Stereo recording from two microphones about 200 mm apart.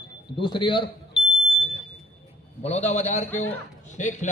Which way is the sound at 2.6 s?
35° left (ahead or behind).